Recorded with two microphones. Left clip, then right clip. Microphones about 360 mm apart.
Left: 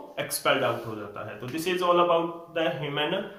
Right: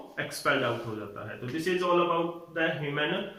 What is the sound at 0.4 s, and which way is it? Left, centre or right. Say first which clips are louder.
Speech: left 3 dB; centre.